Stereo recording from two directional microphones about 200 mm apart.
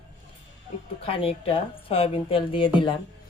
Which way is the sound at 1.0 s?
30° left (ahead or behind).